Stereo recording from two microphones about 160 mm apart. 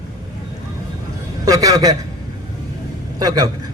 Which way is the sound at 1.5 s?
20° right (ahead or behind).